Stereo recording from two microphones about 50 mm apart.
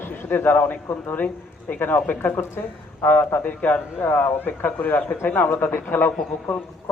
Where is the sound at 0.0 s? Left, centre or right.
Left.